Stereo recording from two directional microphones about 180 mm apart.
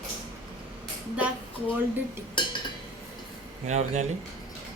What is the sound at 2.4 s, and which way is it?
Dishes, 25° left (ahead or behind).